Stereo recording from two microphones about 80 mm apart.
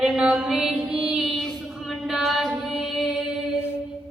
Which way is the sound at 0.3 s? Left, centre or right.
Centre.